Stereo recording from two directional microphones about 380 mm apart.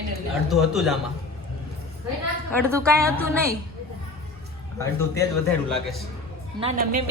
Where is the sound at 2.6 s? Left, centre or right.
Centre.